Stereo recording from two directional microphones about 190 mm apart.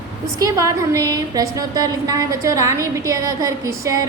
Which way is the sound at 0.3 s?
20° right (ahead or behind).